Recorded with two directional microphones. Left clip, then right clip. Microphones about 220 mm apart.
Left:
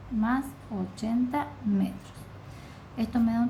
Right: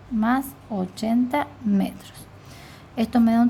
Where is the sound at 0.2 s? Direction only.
45° right (ahead or behind).